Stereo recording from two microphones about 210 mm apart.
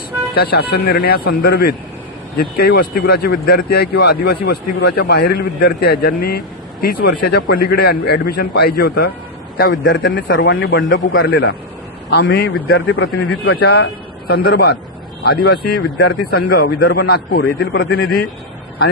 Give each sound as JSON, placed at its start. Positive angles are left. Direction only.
{"t": 0.3, "sound": "a man's voice", "side_deg": 50}
{"t": 11.2, "sound": "speech", "side_deg": 50}
{"t": 12.9, "sound": "a man's voice", "side_deg": 60}
{"t": 13.6, "sound": "speech", "side_deg": 50}